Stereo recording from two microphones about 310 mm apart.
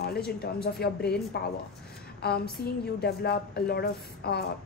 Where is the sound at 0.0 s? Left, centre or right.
Left.